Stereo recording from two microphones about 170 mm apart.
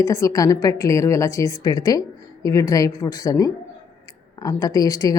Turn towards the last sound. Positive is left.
turn(degrees=20)  # may be behind; listen again after turning